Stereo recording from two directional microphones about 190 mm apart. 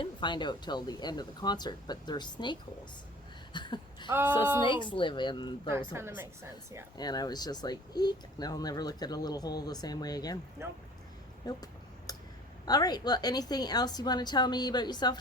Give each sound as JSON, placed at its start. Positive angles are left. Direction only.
{"t": 0.0, "sound": "speech", "side_deg": 25}
{"t": 3.5, "sound": "a sound", "side_deg": 25}
{"t": 4.1, "sound": "a woman's voice", "side_deg": -10}
{"t": 4.6, "sound": "speech", "side_deg": 25}
{"t": 5.9, "sound": "a woman's voice", "side_deg": -10}
{"t": 6.9, "sound": "speech", "side_deg": 20}
{"t": 10.6, "sound": "a woman's voice", "side_deg": -15}
{"t": 11.4, "sound": "a sound", "side_deg": 20}
{"t": 12.6, "sound": "speech", "side_deg": 20}